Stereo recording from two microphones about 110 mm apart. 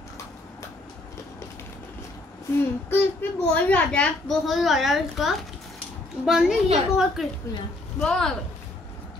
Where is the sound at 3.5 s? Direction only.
15° left (ahead or behind).